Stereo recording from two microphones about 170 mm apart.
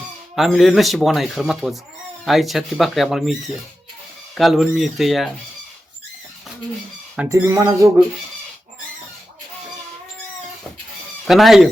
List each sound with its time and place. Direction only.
0.3 s speech: centre (ahead or behind)
4.4 s speech: centre (ahead or behind)
7.3 s a sound: 15° right (ahead or behind)
11.3 s speech: centre (ahead or behind)